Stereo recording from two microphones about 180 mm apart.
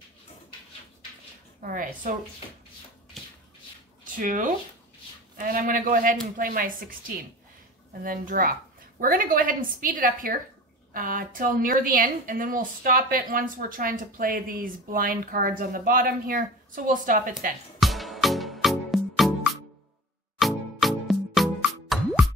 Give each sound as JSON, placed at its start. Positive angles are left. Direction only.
{"t": 1.6, "sound": "a woman's voice", "side_deg": -50}
{"t": 4.0, "sound": "a woman's voice", "side_deg": -50}
{"t": 8.0, "sound": "a woman's voice", "side_deg": -50}
{"t": 17.7, "sound": "music", "side_deg": 0}
{"t": 20.3, "sound": "music", "side_deg": 0}